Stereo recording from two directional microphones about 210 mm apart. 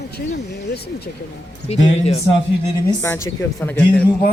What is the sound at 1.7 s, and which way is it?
Speech, 30° left (ahead or behind).